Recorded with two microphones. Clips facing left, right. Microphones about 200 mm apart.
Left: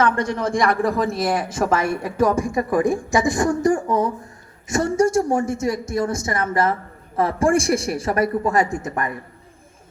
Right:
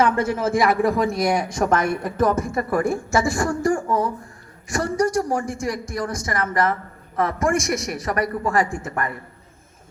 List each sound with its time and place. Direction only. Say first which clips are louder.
0.0 s speech: right 1 dB; 5° right (ahead or behind); by 9.1 s 20° left (ahead or behind)